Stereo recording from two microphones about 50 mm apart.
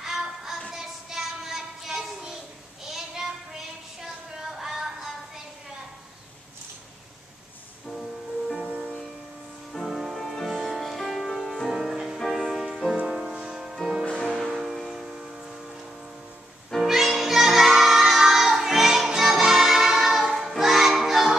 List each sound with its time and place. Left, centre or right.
0.0 s music: centre
0.7 s child singing: centre
2.8 s a sound: centre
8.5 s music: centre
9.8 s music: centre
14.0 s music: centre
14.3 s music: centre
16.8 s music: centre